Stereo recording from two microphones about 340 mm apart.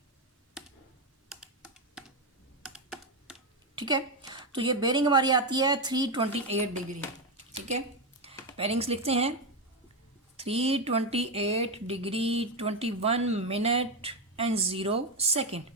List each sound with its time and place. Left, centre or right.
1.3 s computer keyboard: centre
3.8 s speech: centre
8.5 s speech: centre
10.3 s speech: centre